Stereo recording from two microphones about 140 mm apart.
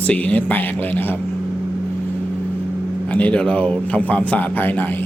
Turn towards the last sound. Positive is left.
turn(degrees=10)  # may be behind; listen again after turning